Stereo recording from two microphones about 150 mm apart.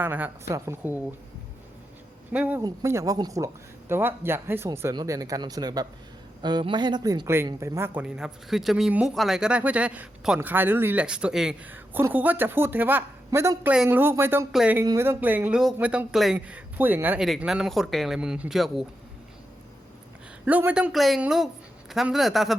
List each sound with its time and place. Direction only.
0.0 s speech: 10° right (ahead or behind)
2.3 s speech: 10° right (ahead or behind)
2.6 s a man's voice: 20° right (ahead or behind)
8.0 s speech: 5° right (ahead or behind)
20.4 s speech: 10° right (ahead or behind)